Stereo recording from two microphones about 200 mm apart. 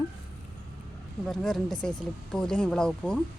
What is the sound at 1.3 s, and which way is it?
Speech, centre (ahead or behind).